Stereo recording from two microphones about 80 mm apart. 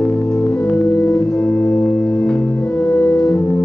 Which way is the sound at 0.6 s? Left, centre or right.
Centre.